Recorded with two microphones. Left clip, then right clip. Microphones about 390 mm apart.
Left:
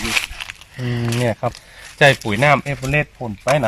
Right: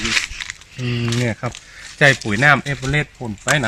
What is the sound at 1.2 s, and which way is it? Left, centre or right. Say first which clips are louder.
Speech: left 3 dB; centre.